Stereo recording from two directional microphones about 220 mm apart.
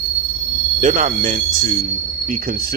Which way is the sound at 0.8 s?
35° right (ahead or behind).